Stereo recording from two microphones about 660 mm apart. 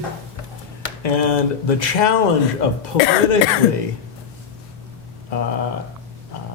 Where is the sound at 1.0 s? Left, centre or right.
Left.